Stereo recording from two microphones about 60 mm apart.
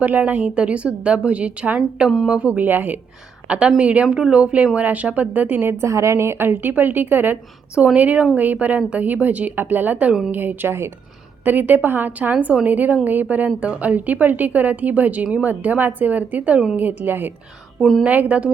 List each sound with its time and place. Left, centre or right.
0.0 s speech: right
3.5 s speech: centre
5.8 s a woman's voice: right
11.4 s a woman's voice: right